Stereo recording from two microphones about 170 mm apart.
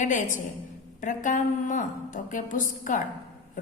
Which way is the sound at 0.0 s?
45° left (ahead or behind).